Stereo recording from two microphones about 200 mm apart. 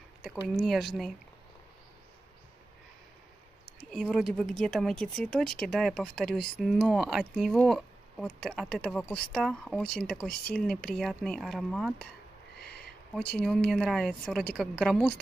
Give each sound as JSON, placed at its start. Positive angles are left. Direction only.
{"t": 0.7, "sound": "speech", "side_deg": 0}
{"t": 3.9, "sound": "speech", "side_deg": 0}
{"t": 12.5, "sound": "a sound", "side_deg": 50}
{"t": 13.1, "sound": "speech", "side_deg": 5}